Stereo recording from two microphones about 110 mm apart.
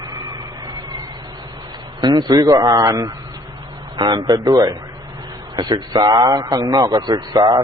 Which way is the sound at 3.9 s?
45° right (ahead or behind).